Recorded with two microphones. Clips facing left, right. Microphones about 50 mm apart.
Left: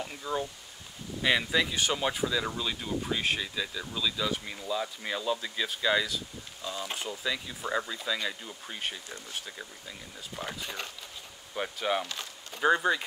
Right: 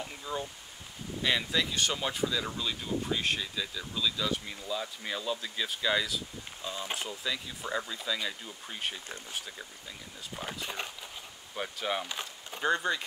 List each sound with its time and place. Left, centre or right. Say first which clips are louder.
0.0 s speech: left 3 dB; centre
6.6 s speech: left 1 dB; centre
7.1 s speech: left 2 dB; centre
10.3 s speech: even; centre
12.1 s speech: right 1 dB; centre
12.6 s speech: left 4 dB; centre